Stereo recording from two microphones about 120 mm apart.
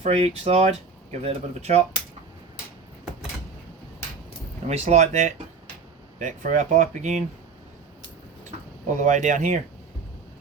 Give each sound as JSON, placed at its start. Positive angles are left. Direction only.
{"t": 0.0, "sound": "speech", "side_deg": -55}
{"t": 4.7, "sound": "speech", "side_deg": -70}
{"t": 6.1, "sound": "speech", "side_deg": -90}
{"t": 9.0, "sound": "speech", "side_deg": -90}